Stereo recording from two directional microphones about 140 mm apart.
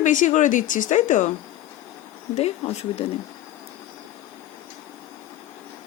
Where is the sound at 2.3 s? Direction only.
50° left (ahead or behind).